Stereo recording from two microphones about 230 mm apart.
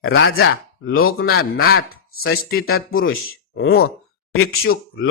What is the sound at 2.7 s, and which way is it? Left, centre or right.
Speech, left.